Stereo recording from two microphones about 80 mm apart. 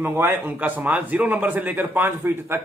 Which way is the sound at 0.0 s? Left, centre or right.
Right.